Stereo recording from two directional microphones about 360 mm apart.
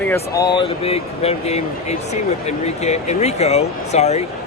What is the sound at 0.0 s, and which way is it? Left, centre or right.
Speech, centre.